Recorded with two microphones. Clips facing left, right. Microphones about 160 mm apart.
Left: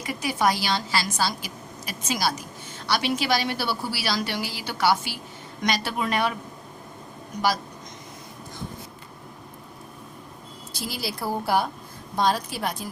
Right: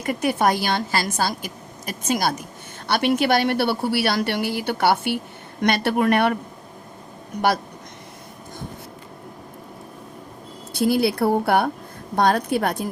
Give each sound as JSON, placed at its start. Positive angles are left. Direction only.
{"t": 0.0, "sound": "a woman's voice", "side_deg": -55}
{"t": 10.7, "sound": "a woman's voice", "side_deg": -60}